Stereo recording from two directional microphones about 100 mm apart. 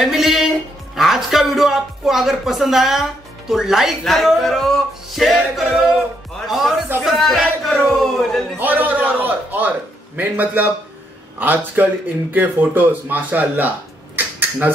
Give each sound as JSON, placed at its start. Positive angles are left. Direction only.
{"t": 0.0, "sound": "music", "side_deg": -5}
{"t": 0.9, "sound": "speech", "side_deg": -5}
{"t": 8.5, "sound": "a man's voice", "side_deg": -15}